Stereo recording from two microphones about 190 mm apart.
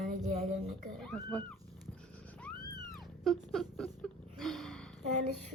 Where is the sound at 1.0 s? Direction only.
5° left (ahead or behind).